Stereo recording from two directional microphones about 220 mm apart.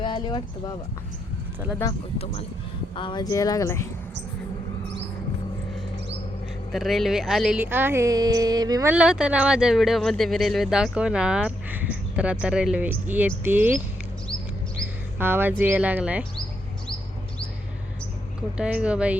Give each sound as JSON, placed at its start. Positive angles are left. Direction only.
{"t": 0.0, "sound": "clip-clop", "side_deg": 20}
{"t": 1.8, "sound": "speech", "side_deg": 10}
{"t": 2.1, "sound": "speech", "side_deg": 25}
{"t": 6.7, "sound": "speech", "side_deg": 0}
{"t": 15.2, "sound": "speech", "side_deg": -10}
{"t": 18.5, "sound": "speech", "side_deg": -5}